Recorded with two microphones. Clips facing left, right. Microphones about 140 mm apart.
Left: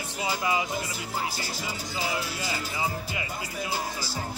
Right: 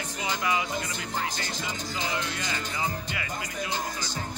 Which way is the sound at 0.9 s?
5° left (ahead or behind).